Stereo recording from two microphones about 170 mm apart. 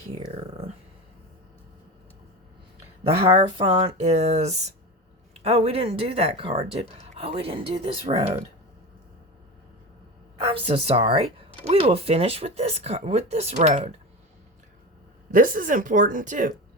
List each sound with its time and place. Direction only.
0.3 s a sound: 35° right (ahead or behind)
3.3 s speech: 30° right (ahead or behind)
10.4 s speech: 35° right (ahead or behind)
15.3 s speech: 55° right (ahead or behind)